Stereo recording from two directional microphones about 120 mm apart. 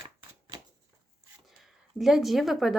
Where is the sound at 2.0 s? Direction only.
Centre (ahead or behind).